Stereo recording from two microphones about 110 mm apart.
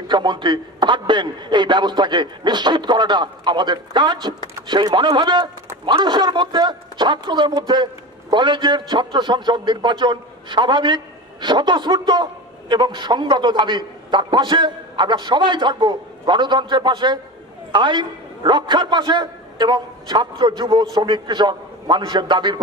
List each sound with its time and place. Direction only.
0.1 s a man's voice: 45° right (ahead or behind)